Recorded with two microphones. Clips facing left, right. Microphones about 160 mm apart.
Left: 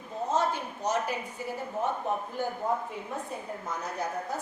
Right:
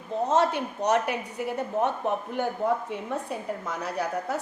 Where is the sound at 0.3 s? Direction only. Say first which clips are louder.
Right 4 dB; 70° right (ahead or behind).